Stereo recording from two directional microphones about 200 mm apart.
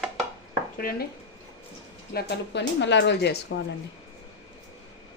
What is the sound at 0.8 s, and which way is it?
Speech, 45° left (ahead or behind).